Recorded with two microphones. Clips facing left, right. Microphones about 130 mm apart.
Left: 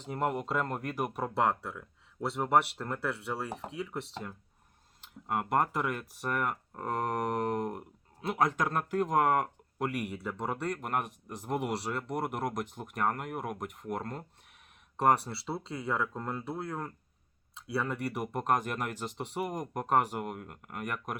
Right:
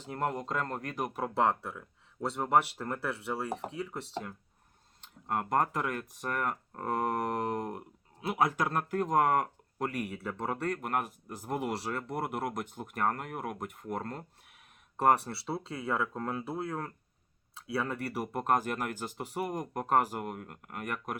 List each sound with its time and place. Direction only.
0.0 s speech: 5° left (ahead or behind)
4.9 s speech: 5° left (ahead or behind)